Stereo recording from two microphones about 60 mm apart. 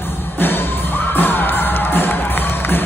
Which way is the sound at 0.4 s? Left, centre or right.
Left.